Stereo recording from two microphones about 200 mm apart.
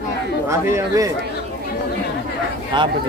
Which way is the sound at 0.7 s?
15° right (ahead or behind).